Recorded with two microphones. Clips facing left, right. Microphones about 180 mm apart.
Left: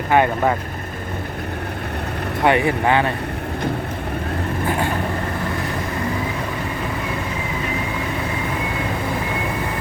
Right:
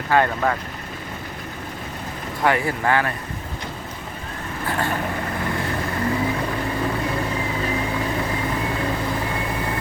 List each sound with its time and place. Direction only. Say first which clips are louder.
0.1 s speech: left 3 dB; 20° left (ahead or behind)
2.4 s speech: left 4 dB; 20° left (ahead or behind)